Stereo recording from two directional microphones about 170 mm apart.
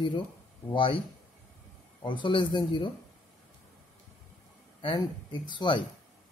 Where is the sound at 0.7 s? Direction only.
30° left (ahead or behind).